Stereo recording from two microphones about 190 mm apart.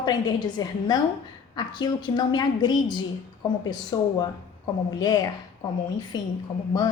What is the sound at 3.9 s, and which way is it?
Speech, 20° left (ahead or behind).